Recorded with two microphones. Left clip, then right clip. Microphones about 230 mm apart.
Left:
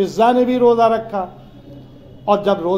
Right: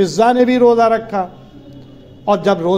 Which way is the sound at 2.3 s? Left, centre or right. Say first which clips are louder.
Right 2 dB; right.